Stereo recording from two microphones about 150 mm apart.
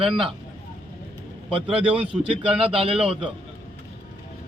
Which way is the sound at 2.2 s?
40° right (ahead or behind).